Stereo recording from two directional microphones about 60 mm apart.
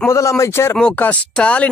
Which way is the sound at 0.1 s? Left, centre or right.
Left.